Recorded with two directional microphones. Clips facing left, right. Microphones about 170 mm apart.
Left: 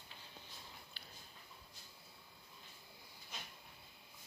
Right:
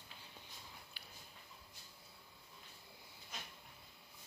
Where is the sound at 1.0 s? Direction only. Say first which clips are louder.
Left 1 dB; 15° right (ahead or behind).